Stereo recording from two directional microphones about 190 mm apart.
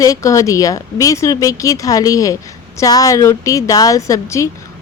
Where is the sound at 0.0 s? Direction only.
15° left (ahead or behind).